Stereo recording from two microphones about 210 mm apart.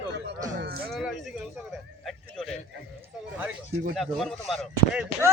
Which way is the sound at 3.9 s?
Centre (ahead or behind).